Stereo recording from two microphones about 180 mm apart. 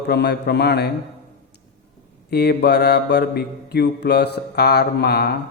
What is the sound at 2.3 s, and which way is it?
Mantra, 60° left (ahead or behind).